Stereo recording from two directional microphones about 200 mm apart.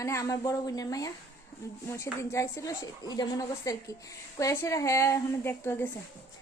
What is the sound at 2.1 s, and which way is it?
A woman's voice, 15° left (ahead or behind).